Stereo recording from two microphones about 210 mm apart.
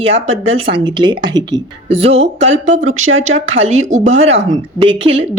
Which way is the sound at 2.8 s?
65° right (ahead or behind).